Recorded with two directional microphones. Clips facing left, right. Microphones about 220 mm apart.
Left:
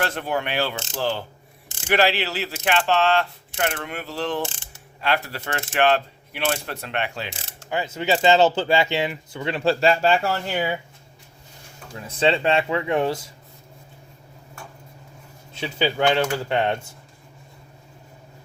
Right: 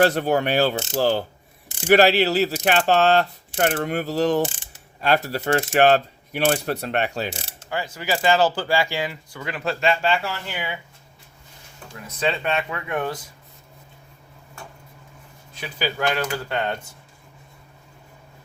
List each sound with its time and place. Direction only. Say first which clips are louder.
0.0 s speech: right 7 dB; 40° right (ahead or behind)
7.7 s speech: left 3 dB; 20° left (ahead or behind); by 10.8 s 40° left (ahead or behind)
12.0 s speech: left 4 dB; 30° left (ahead or behind)
15.5 s speech: left 4 dB; 25° left (ahead or behind)